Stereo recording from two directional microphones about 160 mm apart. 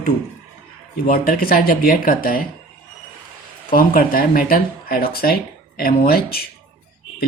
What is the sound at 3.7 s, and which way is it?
Speech, 65° left (ahead or behind).